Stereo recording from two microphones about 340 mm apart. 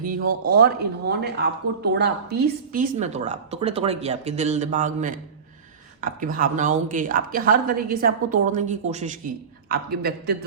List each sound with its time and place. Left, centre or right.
0.3 s a woman's voice: right